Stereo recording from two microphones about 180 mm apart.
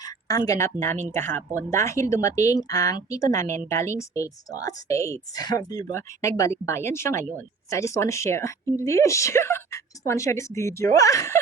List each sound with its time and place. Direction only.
0.0 s a woman's voice: 20° left (ahead or behind)